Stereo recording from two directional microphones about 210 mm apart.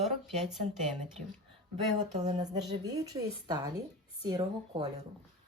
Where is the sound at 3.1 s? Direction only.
20° right (ahead or behind).